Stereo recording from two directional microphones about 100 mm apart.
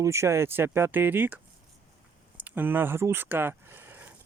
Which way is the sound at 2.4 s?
20° right (ahead or behind).